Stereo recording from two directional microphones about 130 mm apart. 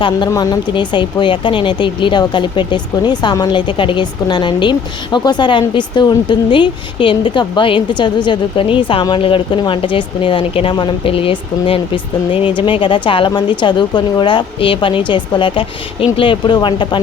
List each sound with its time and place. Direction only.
0.3 s speech: 30° left (ahead or behind)